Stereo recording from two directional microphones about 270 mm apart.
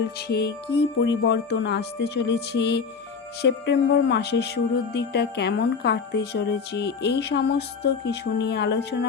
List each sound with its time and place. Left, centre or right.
0.3 s speech: left